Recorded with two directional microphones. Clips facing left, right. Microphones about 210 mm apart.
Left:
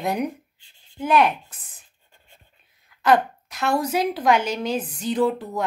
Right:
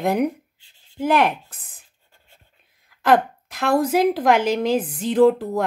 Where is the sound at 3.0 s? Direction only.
55° right (ahead or behind).